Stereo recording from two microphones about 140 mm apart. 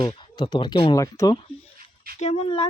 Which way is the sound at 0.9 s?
25° left (ahead or behind).